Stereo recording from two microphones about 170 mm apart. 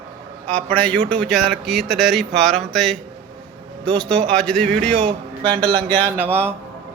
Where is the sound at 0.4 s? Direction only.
5° left (ahead or behind).